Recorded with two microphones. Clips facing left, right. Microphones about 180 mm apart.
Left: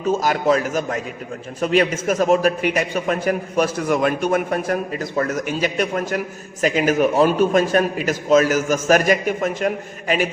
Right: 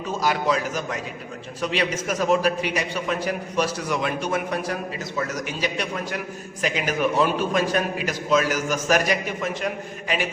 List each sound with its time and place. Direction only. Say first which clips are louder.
0.2 s a man's voice: left 4 dB; 45° left (ahead or behind)